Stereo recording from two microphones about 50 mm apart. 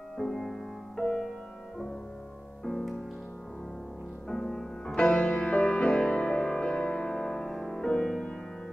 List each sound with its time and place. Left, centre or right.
0.2 s music: centre
2.6 s music: centre
4.3 s music: centre
5.2 s music: left